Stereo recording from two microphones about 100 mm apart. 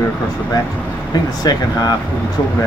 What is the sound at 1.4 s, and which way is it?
Speech, 40° left (ahead or behind).